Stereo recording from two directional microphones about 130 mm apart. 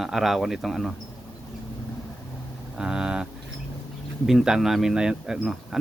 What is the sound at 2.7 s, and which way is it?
Speech, 5° right (ahead or behind).